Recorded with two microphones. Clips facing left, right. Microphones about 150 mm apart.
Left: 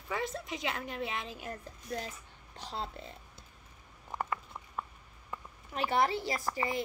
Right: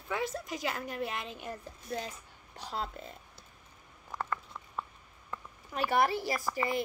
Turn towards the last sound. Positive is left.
turn(degrees=20)  # may be behind; listen again after turning